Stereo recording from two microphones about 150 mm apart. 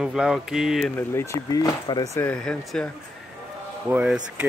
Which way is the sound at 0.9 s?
15° left (ahead or behind).